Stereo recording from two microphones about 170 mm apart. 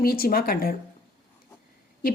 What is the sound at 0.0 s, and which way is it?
Speech, 60° left (ahead or behind).